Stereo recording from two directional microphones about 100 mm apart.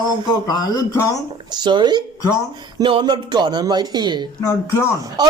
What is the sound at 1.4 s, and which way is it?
Speech, 45° right (ahead or behind).